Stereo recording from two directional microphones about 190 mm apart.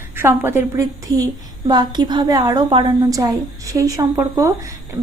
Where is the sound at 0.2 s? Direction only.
15° right (ahead or behind).